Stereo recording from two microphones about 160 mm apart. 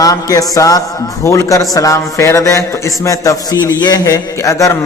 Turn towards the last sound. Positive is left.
turn(degrees=20)  # may be behind; listen again after turning